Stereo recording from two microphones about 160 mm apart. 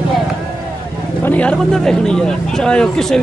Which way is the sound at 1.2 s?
10° left (ahead or behind).